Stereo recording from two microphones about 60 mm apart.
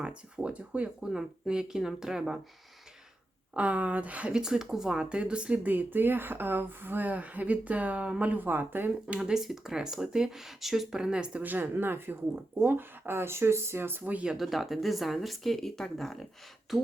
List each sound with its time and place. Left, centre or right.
0.0 s speech: centre
3.5 s speech: right
5.6 s speech: right
9.0 s speech: centre
11.4 s speech: right
14.0 s speech: right
14.3 s speech: centre